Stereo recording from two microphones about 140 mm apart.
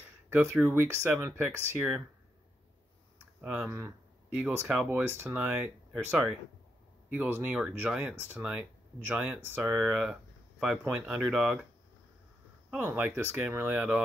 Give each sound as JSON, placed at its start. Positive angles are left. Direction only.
{"t": 0.3, "sound": "speech", "side_deg": -20}
{"t": 3.3, "sound": "speech", "side_deg": -10}
{"t": 3.6, "sound": "a sound", "side_deg": -20}
{"t": 4.4, "sound": "speech", "side_deg": -10}
{"t": 12.7, "sound": "speech", "side_deg": -15}